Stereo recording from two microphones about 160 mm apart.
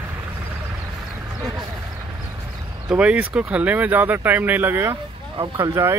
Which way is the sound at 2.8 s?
5° right (ahead or behind).